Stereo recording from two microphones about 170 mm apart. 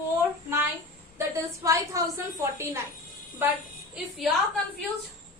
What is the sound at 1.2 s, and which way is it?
A woman's voice, 20° right (ahead or behind).